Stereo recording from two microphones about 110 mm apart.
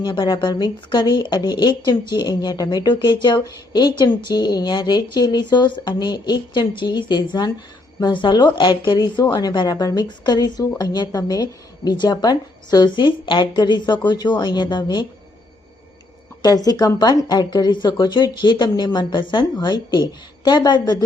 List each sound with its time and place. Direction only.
0.0 s speech: 40° left (ahead or behind)
16.4 s a woman's voice: 35° left (ahead or behind)